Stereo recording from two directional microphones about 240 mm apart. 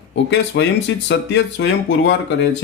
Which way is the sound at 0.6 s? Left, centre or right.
Left.